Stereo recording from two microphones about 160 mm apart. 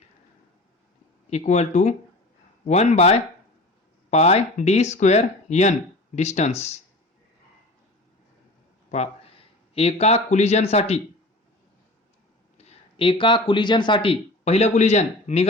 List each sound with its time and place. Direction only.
1.3 s speech: 45° left (ahead or behind)
8.9 s speech: 45° left (ahead or behind)
12.5 s speech: 40° left (ahead or behind)